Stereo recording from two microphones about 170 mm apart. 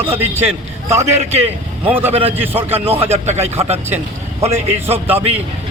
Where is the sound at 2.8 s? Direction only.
35° right (ahead or behind).